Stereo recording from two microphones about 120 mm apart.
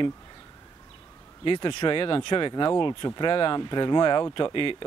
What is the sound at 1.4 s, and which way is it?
Speech, 40° left (ahead or behind).